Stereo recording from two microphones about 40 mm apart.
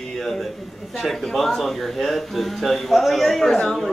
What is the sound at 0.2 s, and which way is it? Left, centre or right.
A man's voice, centre.